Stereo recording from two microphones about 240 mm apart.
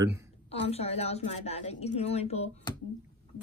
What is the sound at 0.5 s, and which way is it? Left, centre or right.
A woman's voice, left.